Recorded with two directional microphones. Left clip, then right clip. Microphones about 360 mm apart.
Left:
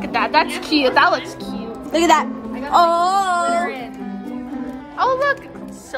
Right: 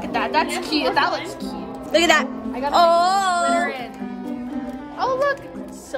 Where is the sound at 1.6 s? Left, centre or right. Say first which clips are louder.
Left 2 dB; centre.